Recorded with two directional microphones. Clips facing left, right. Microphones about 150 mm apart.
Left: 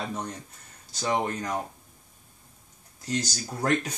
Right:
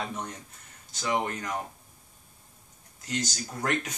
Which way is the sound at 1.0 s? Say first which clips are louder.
Left 2 dB; 35° left (ahead or behind).